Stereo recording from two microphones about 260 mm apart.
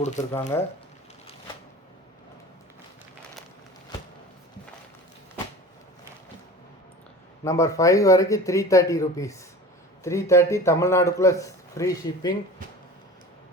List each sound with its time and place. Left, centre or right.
0.0 s speech: left
0.5 s a man's voice: centre
7.4 s a man's voice: centre